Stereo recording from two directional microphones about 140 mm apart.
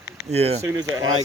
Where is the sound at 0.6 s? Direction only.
25° right (ahead or behind).